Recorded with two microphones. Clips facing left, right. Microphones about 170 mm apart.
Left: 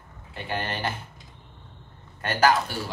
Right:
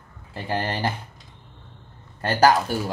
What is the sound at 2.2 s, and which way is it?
Speech, 35° right (ahead or behind).